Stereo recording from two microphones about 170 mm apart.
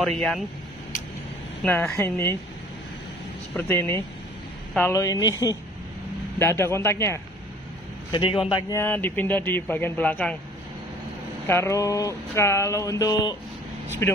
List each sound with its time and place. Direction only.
0.0 s speech: 5° left (ahead or behind)
1.6 s speech: 10° left (ahead or behind)
3.5 s a man's voice: 15° left (ahead or behind)
8.1 s speech: 30° left (ahead or behind); by 10.3 s 10° left (ahead or behind)
11.4 s speech: 15° left (ahead or behind)